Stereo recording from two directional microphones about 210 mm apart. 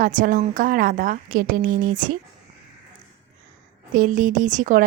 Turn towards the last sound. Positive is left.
turn(degrees=-35)  # may be behind; listen again after turning